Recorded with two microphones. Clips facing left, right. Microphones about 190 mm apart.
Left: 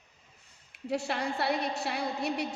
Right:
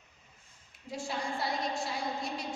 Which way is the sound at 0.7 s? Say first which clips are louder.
Left 6 dB; 70° left (ahead or behind).